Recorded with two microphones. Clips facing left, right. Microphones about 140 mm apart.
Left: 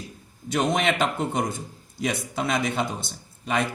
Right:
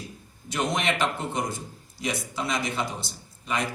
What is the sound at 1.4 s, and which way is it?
A man's voice, 55° left (ahead or behind).